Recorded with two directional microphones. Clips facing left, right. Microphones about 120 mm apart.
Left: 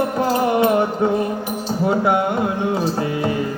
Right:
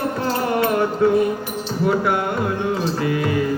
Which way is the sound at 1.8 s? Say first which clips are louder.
Left 2 dB; 25° left (ahead or behind).